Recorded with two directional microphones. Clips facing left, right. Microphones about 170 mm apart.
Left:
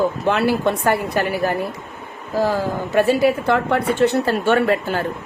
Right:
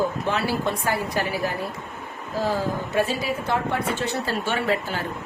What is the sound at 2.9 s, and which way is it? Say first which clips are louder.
A woman's voice: left 10 dB; 65° left (ahead or behind).